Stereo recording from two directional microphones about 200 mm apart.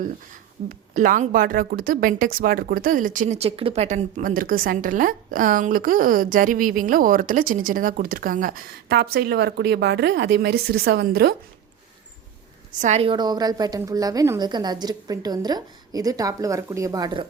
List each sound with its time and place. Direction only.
0.7 s a woman's voice: 40° right (ahead or behind)
12.8 s a woman's voice: 30° right (ahead or behind)